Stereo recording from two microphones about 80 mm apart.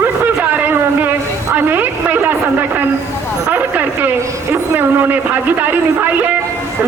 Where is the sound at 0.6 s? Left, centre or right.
Right.